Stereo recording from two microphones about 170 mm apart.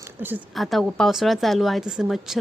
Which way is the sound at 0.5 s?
Centre (ahead or behind).